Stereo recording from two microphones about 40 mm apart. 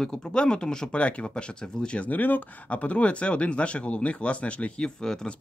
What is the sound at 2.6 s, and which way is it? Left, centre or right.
Speech, left.